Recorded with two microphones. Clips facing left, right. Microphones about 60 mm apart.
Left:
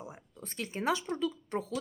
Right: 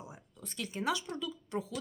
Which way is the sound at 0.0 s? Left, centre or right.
Left.